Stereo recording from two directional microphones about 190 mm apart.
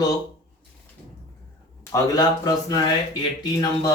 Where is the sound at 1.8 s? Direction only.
20° left (ahead or behind).